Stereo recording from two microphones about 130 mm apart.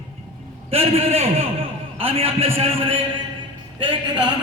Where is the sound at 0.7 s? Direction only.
50° right (ahead or behind).